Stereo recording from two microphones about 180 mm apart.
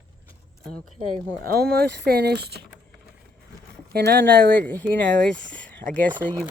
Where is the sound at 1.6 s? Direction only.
55° right (ahead or behind).